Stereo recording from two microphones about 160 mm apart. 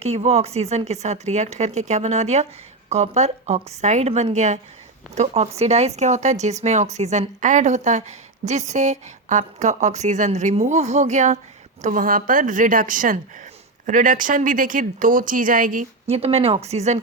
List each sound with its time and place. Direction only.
0.0 s a woman's voice: 40° right (ahead or behind); by 15.9 s 60° right (ahead or behind)
16.0 s speech: 40° right (ahead or behind)